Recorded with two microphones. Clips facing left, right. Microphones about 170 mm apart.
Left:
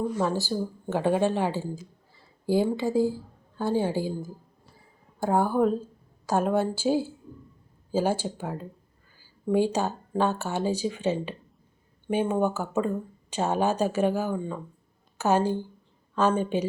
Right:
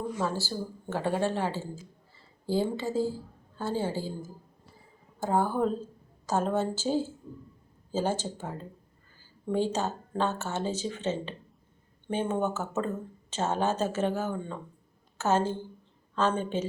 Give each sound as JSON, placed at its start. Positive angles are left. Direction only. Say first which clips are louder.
{"t": 0.2, "sound": "speech", "louder": "left 5 dB", "side_deg": 15}